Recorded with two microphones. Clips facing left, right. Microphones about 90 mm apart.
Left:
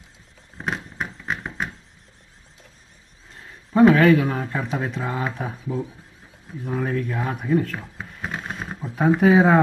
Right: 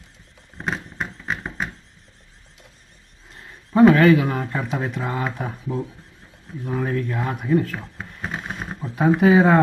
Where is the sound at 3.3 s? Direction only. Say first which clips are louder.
Right 1 dB; centre (ahead or behind).